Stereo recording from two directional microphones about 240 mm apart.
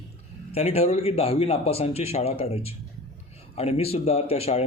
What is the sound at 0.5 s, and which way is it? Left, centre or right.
Speech, left.